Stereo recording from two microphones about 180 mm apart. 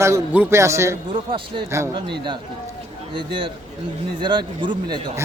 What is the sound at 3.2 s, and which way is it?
Speech, 25° right (ahead or behind).